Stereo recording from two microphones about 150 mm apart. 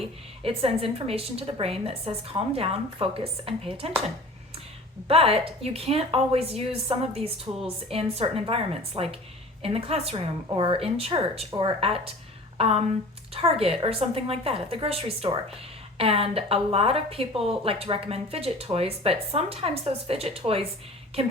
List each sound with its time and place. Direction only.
0.4 s a woman's voice: 40° right (ahead or behind)
5.0 s a woman's voice: 40° right (ahead or behind)
7.5 s speech: 25° right (ahead or behind)
7.9 s a woman's voice: 40° right (ahead or behind)